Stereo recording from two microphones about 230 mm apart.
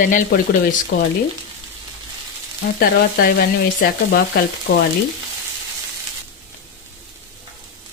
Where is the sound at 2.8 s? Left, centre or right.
Left.